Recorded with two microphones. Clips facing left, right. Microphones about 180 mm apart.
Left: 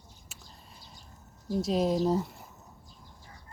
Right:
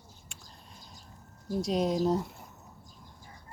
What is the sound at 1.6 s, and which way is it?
Speech, centre (ahead or behind).